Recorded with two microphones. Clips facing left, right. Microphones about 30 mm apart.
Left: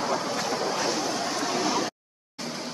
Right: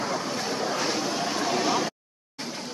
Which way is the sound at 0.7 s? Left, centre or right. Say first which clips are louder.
Even; centre.